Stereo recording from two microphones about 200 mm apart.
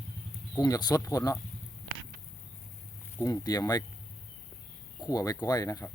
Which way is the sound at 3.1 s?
15° left (ahead or behind).